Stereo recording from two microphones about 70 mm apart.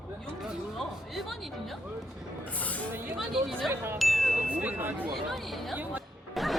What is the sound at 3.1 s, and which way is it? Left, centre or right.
Speech, centre.